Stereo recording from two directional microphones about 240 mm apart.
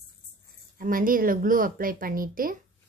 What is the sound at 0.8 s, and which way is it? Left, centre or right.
Speech, right.